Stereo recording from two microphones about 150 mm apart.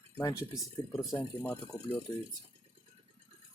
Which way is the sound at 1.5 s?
10° left (ahead or behind).